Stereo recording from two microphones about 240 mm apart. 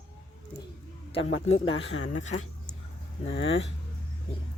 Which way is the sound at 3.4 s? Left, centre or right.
Left.